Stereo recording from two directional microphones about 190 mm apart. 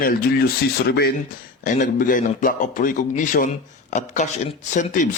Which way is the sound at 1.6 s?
45° left (ahead or behind).